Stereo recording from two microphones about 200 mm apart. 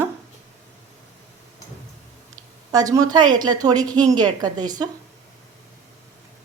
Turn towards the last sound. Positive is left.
turn(degrees=-20)  # may be behind; listen again after turning